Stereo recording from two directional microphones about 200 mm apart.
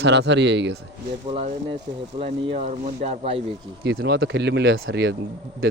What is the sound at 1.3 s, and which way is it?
Speech, 30° right (ahead or behind).